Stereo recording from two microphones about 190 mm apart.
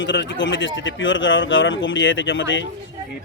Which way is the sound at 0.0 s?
70° left (ahead or behind).